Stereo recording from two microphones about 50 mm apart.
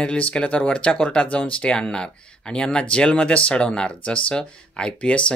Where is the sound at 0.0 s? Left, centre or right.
Left.